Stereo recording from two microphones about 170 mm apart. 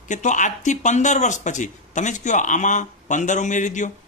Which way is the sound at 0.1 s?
45° left (ahead or behind).